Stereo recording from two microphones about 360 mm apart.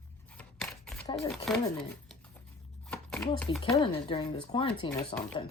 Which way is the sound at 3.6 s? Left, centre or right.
Centre.